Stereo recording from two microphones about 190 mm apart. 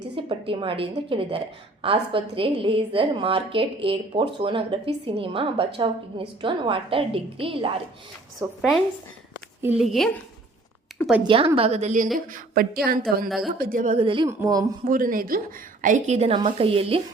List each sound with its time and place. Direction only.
0.2 s a woman's voice: 30° right (ahead or behind)
8.4 s speech: 15° right (ahead or behind)
9.6 s speech: 5° right (ahead or behind)
10.9 s a sound: centre (ahead or behind)
11.3 s a woman's voice: 30° right (ahead or behind)
12.1 s a woman's voice: 50° right (ahead or behind); by 14.3 s 30° right (ahead or behind)
14.3 s speech: 20° right (ahead or behind)
14.8 s a woman's voice: 45° right (ahead or behind); by 17.0 s 30° right (ahead or behind)